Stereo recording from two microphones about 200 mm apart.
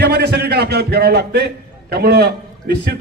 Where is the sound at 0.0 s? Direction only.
55° right (ahead or behind).